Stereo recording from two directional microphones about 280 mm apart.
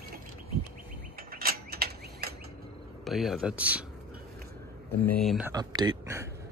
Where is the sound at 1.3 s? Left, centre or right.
Right.